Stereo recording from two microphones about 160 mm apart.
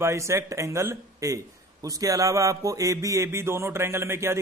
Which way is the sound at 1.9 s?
20° right (ahead or behind).